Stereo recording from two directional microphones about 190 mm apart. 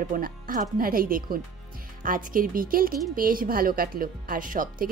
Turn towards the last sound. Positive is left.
turn(degrees=-45)  # may be behind; listen again after turning